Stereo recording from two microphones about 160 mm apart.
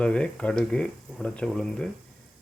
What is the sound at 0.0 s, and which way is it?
Speech, 5° left (ahead or behind).